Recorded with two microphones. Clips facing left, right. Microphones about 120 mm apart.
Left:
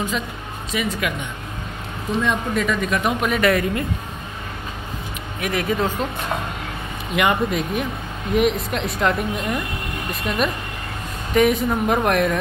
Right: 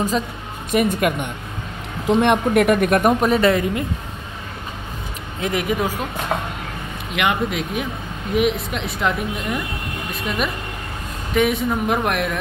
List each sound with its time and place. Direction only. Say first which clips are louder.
0.7 s speech: right 6 dB; 50° right (ahead or behind)
2.0 s speech: right 6 dB; 65° right (ahead or behind); by 3.8 s 25° right (ahead or behind)
5.4 s speech: right 1 dB; 20° right (ahead or behind)
7.2 s speech: left 1 dB; centre (ahead or behind)